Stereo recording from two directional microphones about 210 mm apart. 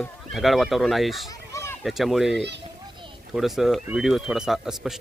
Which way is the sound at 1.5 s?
15° left (ahead or behind).